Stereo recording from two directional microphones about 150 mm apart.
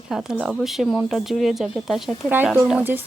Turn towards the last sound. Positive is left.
turn(degrees=-10)  # may be behind; listen again after turning